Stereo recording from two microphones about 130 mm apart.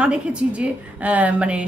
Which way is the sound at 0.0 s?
10° right (ahead or behind).